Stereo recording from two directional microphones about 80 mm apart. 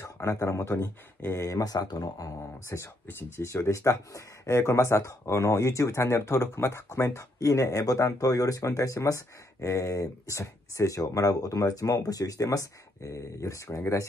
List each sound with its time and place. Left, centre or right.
0.0 s speech: left
1.6 s speech: left